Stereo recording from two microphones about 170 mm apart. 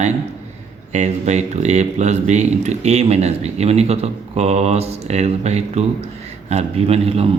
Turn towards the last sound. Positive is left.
turn(degrees=-35)  # may be behind; listen again after turning